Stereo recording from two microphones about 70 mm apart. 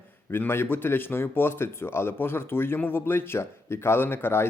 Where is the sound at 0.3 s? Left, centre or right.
Left.